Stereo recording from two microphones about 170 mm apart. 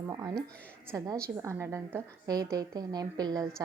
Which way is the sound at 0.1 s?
20° right (ahead or behind).